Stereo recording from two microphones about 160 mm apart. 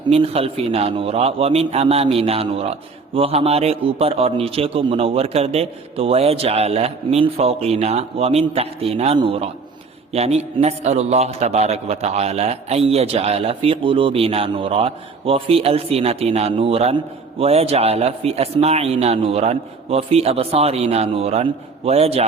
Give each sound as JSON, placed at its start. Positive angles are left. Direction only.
{"t": 0.1, "sound": "a man's voice", "side_deg": -35}